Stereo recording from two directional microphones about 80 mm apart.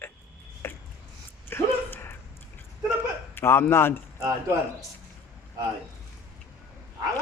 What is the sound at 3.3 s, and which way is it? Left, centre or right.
Speech, left.